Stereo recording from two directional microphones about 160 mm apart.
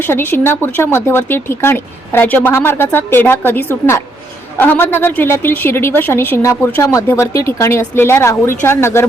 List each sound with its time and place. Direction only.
0.0 s speech: 15° left (ahead or behind)